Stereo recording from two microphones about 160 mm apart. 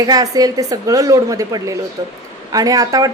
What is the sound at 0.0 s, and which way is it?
A man's voice, 25° right (ahead or behind).